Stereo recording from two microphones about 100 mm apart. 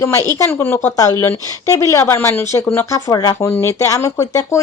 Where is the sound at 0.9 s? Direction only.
35° left (ahead or behind).